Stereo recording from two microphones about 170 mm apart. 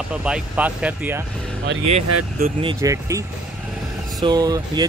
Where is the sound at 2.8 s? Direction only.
20° right (ahead or behind).